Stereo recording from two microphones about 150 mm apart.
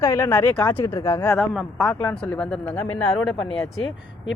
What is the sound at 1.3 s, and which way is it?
Speech, centre (ahead or behind).